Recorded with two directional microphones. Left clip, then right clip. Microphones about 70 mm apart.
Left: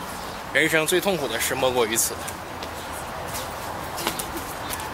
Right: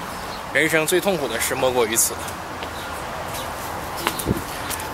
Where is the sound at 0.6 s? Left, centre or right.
Centre.